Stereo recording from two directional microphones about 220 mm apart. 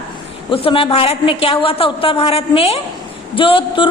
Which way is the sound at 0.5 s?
25° left (ahead or behind).